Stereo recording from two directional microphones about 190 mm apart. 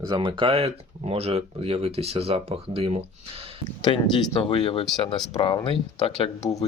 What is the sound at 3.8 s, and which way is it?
Speech, 25° left (ahead or behind).